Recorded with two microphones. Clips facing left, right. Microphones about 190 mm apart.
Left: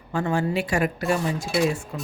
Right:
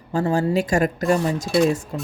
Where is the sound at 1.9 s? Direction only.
30° right (ahead or behind).